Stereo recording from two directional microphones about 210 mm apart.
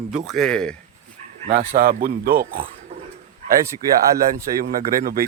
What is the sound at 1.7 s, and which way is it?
Speech, 45° right (ahead or behind).